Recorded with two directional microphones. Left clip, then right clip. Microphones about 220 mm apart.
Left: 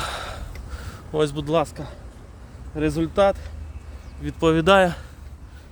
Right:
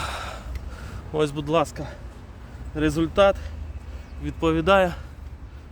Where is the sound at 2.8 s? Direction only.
15° left (ahead or behind).